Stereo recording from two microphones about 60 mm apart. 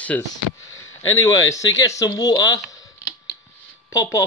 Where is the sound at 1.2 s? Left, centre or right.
Left.